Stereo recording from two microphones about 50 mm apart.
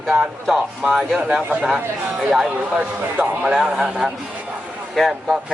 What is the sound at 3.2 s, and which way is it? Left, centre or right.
Speech, right.